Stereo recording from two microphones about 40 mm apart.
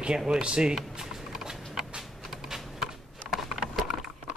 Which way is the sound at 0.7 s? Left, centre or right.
Centre.